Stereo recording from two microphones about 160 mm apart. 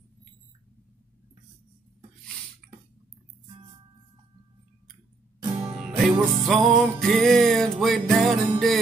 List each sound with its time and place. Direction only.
2.6 s a sound: centre (ahead or behind)
5.4 s music: 35° right (ahead or behind)
5.7 s music: centre (ahead or behind)